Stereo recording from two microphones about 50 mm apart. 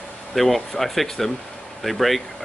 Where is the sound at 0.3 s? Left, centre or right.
Centre.